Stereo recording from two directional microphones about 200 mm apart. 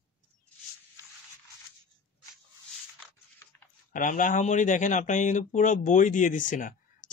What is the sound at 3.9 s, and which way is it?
Speech, 40° left (ahead or behind).